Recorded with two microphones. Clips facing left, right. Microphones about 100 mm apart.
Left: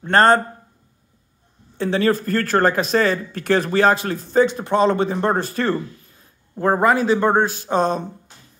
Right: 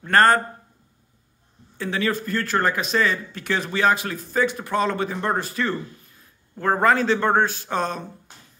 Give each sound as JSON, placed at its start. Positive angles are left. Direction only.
{"t": 0.0, "sound": "a man's voice", "side_deg": 25}
{"t": 1.8, "sound": "speech", "side_deg": 35}
{"t": 6.5, "sound": "a man's voice", "side_deg": 20}